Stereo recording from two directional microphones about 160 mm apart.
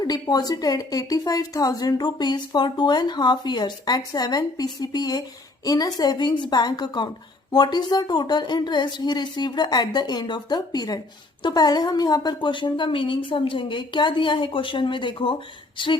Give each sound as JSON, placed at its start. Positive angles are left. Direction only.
{"t": 0.0, "sound": "a woman's voice", "side_deg": 25}